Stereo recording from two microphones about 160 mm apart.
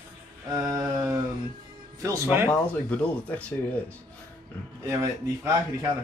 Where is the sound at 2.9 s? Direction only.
10° left (ahead or behind).